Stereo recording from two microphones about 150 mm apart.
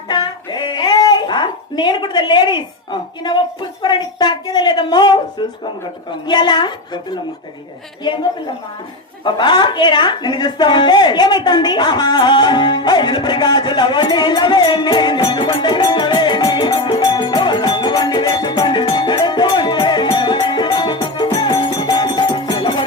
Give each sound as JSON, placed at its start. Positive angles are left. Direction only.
{"t": 0.1, "sound": "a sound", "side_deg": 30}
{"t": 3.2, "sound": "a woman's voice", "side_deg": 30}
{"t": 9.2, "sound": "a woman's voice", "side_deg": 30}